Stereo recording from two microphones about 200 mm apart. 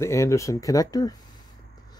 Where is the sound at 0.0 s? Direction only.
15° left (ahead or behind).